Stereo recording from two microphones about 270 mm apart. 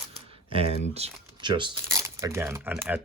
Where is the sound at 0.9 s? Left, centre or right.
Right; by 3.0 s centre.